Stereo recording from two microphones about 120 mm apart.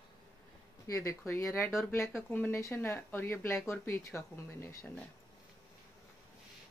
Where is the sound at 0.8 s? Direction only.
25° left (ahead or behind).